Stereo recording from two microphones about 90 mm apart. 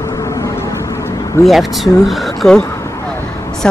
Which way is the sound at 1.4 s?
Centre (ahead or behind).